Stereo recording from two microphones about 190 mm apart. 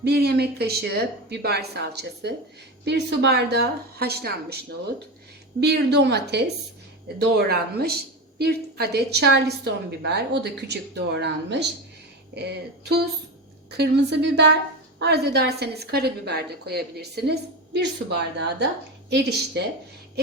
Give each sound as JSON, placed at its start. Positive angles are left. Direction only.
{"t": 0.0, "sound": "a woman's voice", "side_deg": -55}
{"t": 5.5, "sound": "a woman's voice", "side_deg": -60}
{"t": 19.6, "sound": "a woman's voice", "side_deg": -60}